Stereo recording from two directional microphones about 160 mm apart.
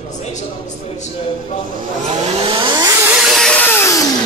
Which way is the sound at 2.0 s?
40° right (ahead or behind).